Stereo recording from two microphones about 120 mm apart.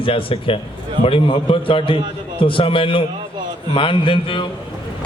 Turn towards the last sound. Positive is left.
turn(degrees=45)  # may be behind; listen again after turning